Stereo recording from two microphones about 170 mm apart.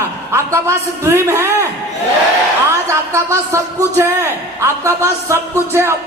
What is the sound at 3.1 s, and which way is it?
A man's voice, 15° right (ahead or behind).